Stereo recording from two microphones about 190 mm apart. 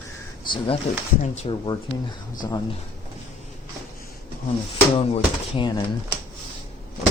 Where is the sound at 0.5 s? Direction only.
30° left (ahead or behind).